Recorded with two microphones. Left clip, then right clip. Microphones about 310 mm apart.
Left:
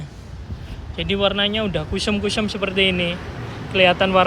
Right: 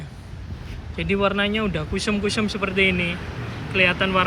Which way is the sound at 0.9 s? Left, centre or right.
Left.